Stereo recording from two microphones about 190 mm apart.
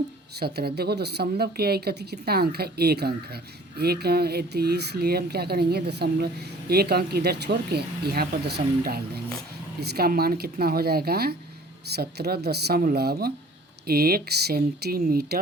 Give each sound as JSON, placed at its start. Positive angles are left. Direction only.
{"t": 0.3, "sound": "speech", "side_deg": -55}